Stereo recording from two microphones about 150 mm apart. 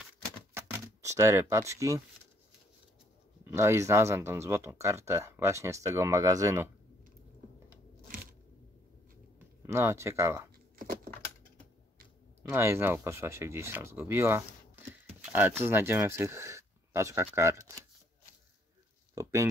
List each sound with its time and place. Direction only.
0.6 s speech: 15° right (ahead or behind)
3.4 s speech: 15° right (ahead or behind)
9.7 s speech: 20° right (ahead or behind)
12.4 s speech: 15° right (ahead or behind)
15.6 s speech: 15° right (ahead or behind)
19.1 s a sound: 20° right (ahead or behind)